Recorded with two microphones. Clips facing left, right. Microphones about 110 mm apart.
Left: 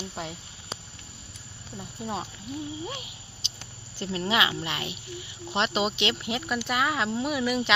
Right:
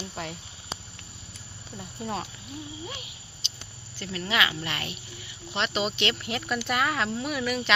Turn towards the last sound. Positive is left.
turn(degrees=15)  # may be behind; listen again after turning